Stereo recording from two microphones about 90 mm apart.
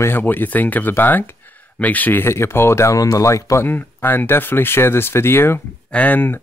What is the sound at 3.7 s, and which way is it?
Speech, 25° left (ahead or behind).